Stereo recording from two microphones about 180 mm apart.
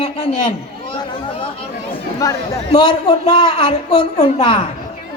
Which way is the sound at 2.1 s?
20° left (ahead or behind).